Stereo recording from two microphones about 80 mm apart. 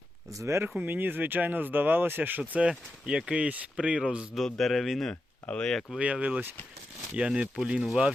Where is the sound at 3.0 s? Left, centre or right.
Centre.